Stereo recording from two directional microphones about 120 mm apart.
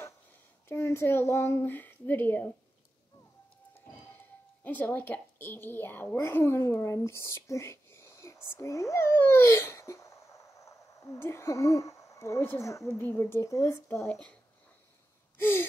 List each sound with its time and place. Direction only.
0.7 s speech: 20° left (ahead or behind)
4.6 s a child's voice: 15° left (ahead or behind)
14.0 s speech: 5° left (ahead or behind)
15.3 s gasp: 15° left (ahead or behind)